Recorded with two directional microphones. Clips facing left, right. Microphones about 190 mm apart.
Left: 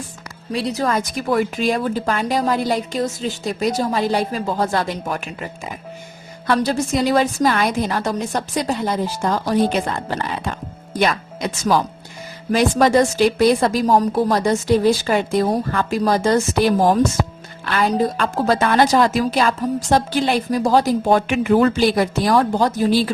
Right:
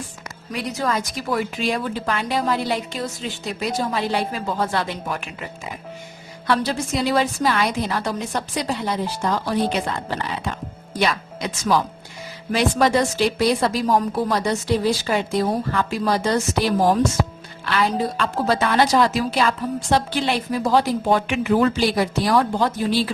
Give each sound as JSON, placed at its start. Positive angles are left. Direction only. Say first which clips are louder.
{"t": 0.5, "sound": "a woman's voice", "louder": "left 4 dB", "side_deg": 35}
{"t": 0.9, "sound": "a woman's voice", "louder": "left 5 dB", "side_deg": 50}
{"t": 6.5, "sound": "a woman's voice", "louder": "left 3 dB", "side_deg": 45}